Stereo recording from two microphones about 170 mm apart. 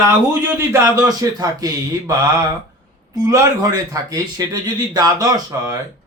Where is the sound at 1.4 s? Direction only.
20° right (ahead or behind).